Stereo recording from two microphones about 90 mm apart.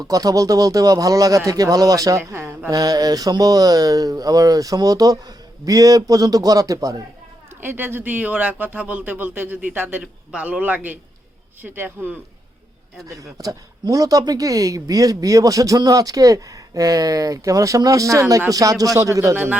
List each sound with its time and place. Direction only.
0.0 s speech: 40° right (ahead or behind)
2.6 s speech: 45° right (ahead or behind)
7.6 s a man's voice: 25° right (ahead or behind)
13.1 s speech: 40° right (ahead or behind)